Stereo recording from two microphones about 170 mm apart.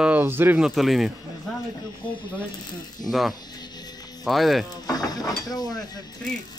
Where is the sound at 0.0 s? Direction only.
10° right (ahead or behind).